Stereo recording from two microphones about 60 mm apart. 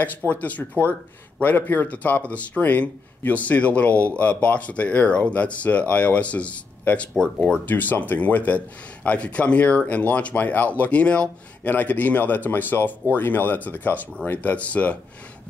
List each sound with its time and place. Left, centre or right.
0.3 s speech: left
7.6 s speech: left